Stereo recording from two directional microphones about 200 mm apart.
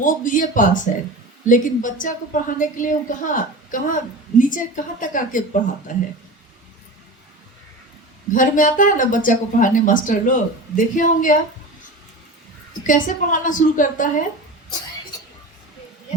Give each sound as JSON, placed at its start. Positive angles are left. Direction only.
{"t": 0.0, "sound": "a woman's voice", "side_deg": 40}
{"t": 8.3, "sound": "a woman's voice", "side_deg": 40}
{"t": 12.8, "sound": "a woman's voice", "side_deg": 40}